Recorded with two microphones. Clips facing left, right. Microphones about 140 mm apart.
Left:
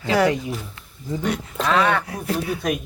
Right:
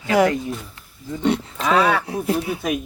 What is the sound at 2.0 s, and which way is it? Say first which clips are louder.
Speech: right 4 dB; 25° right (ahead or behind).